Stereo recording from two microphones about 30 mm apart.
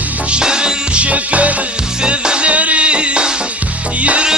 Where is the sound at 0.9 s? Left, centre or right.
Right.